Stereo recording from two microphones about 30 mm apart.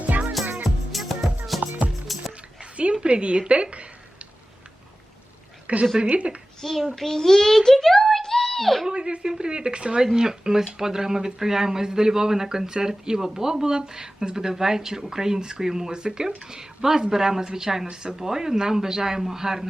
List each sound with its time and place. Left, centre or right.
0.0 s music: right
0.9 s music: centre
3.1 s a sound: right
6.0 s a woman's voice: right
6.6 s a child's voice: centre
8.9 s a woman's voice: right
10.2 s speech: centre